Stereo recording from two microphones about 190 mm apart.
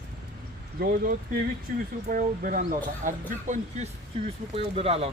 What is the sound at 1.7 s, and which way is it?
Speech, 45° right (ahead or behind).